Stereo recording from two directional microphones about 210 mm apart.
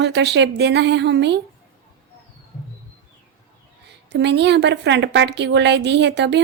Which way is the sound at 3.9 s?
55° right (ahead or behind).